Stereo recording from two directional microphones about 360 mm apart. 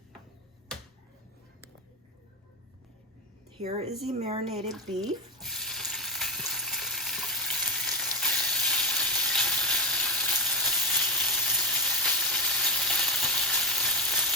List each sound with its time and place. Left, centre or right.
3.6 s a woman's voice: centre
4.7 s speech: centre
5.4 s frying: centre
8.2 s sizzle: centre